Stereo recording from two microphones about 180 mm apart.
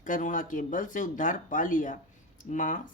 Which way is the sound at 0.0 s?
45° left (ahead or behind).